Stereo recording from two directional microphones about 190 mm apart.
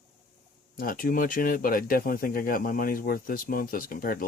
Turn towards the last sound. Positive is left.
turn(degrees=50)  # may be behind; listen again after turning